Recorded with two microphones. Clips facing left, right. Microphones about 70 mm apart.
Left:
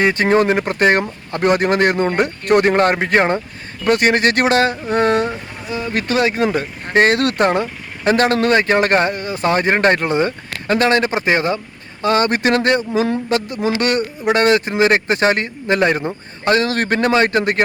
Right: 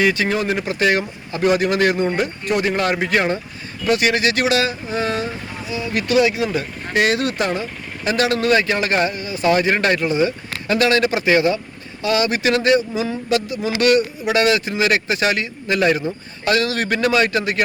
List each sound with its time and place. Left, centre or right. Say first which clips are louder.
0.0 s speech: left 4 dB; left
7.2 s speech: left 5 dB; left
9.5 s speech: left 2 dB; left